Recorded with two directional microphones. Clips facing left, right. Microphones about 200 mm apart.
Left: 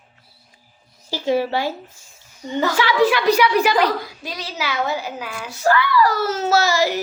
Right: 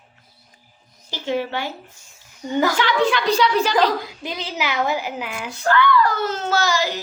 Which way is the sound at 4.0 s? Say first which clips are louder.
Right 2 dB; 20° right (ahead or behind).